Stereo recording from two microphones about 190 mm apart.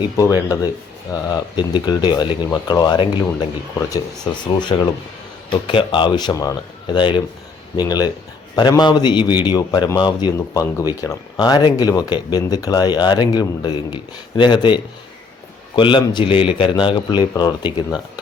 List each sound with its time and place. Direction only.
0.0 s speech: 20° left (ahead or behind)